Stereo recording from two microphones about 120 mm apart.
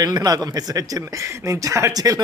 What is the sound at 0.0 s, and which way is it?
Speech, 35° right (ahead or behind).